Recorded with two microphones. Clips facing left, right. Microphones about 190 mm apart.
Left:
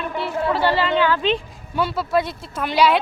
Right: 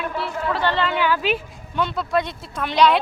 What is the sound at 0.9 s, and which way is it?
Speech, 10° right (ahead or behind).